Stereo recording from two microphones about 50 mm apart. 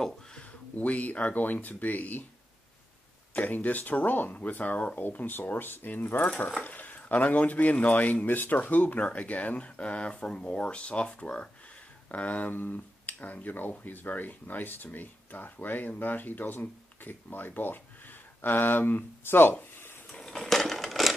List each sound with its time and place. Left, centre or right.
0.4 s speech: left
3.3 s speech: left
6.2 s speech: left
20.1 s a sound: centre
20.3 s coin: centre